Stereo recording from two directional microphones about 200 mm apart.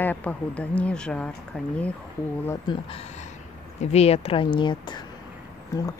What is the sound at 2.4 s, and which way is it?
Speech, 25° left (ahead or behind).